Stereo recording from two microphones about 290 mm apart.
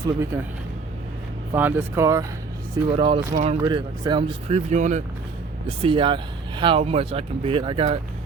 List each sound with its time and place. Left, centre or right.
0.3 s speech: centre
1.5 s speech: centre; by 3.6 s right
3.6 s speech: centre